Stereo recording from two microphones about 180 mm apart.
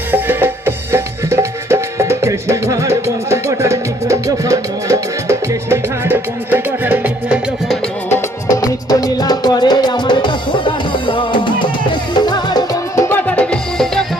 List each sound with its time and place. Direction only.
0.1 s music: 10° right (ahead or behind)
8.1 s music: 20° left (ahead or behind)
13.2 s music: 5° left (ahead or behind)